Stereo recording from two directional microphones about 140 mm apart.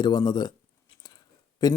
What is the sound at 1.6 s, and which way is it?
Speech, 30° left (ahead or behind).